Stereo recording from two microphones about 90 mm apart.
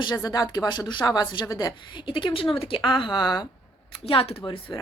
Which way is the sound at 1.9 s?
65° left (ahead or behind).